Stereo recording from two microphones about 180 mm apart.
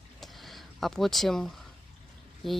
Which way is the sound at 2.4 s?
Centre (ahead or behind).